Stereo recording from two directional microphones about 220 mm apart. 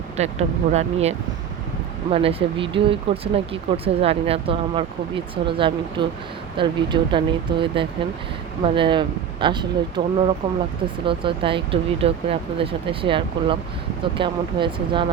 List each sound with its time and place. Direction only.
0.2 s speech: 30° right (ahead or behind)